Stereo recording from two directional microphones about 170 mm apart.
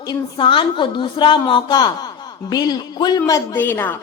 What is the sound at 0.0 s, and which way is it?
A woman's voice, 25° left (ahead or behind).